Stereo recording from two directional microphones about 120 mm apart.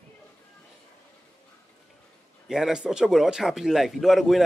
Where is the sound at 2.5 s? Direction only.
5° right (ahead or behind).